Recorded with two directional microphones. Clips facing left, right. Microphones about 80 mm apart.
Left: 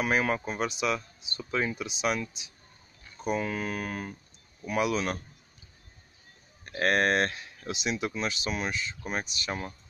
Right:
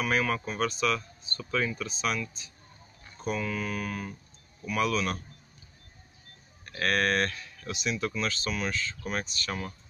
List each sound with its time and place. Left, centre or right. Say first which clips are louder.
0.0 s speech: left 1 dB; left
3.3 s speech: even; left
6.6 s speech: left 2 dB; left